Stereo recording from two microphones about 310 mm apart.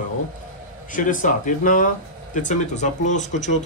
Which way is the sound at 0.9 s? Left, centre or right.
Left.